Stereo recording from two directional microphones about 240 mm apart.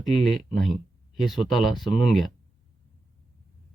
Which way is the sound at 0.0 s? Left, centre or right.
Centre.